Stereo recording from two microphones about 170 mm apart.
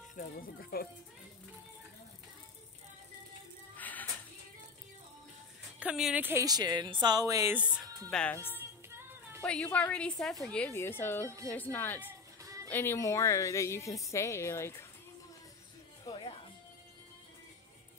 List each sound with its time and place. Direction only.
0.1 s speech: 50° left (ahead or behind)
3.7 s music: 10° left (ahead or behind)
5.8 s speech: 5° right (ahead or behind)
8.1 s a woman's voice: 5° left (ahead or behind)
8.5 s music: 15° right (ahead or behind)
9.4 s a woman's voice: 5° left (ahead or behind)
10.7 s a woman's voice: 15° left (ahead or behind)
12.0 s music: 15° right (ahead or behind)
12.6 s a woman's voice: 10° left (ahead or behind)
16.0 s music: 30° left (ahead or behind)